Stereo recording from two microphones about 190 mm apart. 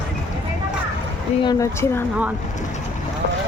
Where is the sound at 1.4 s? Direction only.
15° left (ahead or behind).